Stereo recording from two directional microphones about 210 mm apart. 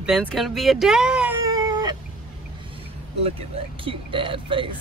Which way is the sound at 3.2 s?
25° right (ahead or behind).